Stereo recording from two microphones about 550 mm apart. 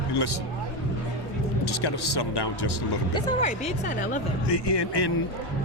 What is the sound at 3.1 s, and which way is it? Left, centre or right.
Speech, centre.